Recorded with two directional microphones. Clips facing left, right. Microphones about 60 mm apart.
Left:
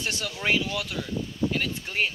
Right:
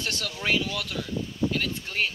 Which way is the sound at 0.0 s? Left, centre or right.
Centre.